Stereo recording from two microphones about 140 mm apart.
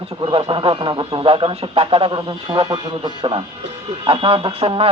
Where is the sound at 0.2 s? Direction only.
35° right (ahead or behind).